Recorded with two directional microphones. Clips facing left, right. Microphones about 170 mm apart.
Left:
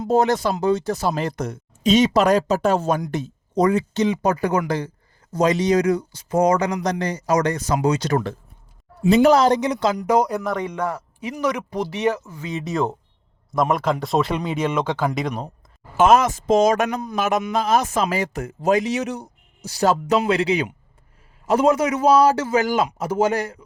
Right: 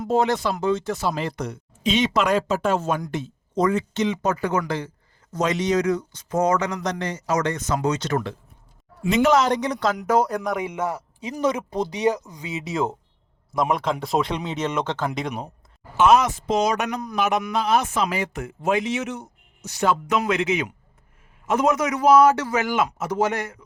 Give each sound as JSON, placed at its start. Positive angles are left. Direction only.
{"t": 0.1, "sound": "speech", "side_deg": 40}
{"t": 5.3, "sound": "speech", "side_deg": 35}
{"t": 9.6, "sound": "speech", "side_deg": 0}
{"t": 10.2, "sound": "speech", "side_deg": 10}
{"t": 10.7, "sound": "speech", "side_deg": -20}
{"t": 12.5, "sound": "speech", "side_deg": 0}
{"t": 16.0, "sound": "speech", "side_deg": 45}